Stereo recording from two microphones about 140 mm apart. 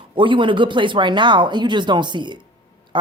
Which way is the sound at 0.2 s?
35° right (ahead or behind).